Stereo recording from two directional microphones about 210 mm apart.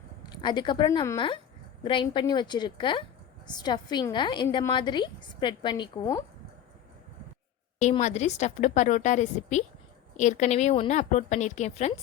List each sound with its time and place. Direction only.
0.2 s a woman's voice: 20° left (ahead or behind)
7.8 s a woman's voice: 35° left (ahead or behind)